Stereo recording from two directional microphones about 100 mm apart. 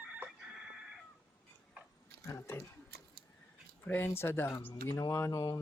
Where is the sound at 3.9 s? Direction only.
20° left (ahead or behind).